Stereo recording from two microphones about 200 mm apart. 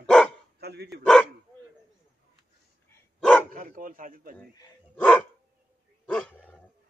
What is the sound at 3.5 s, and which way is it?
Speech, 45° right (ahead or behind).